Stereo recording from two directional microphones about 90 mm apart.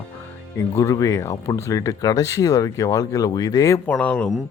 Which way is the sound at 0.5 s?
35° left (ahead or behind).